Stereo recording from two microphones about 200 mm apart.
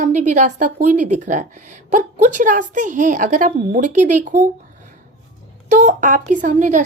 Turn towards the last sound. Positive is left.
turn(degrees=-40)  # may be behind; listen again after turning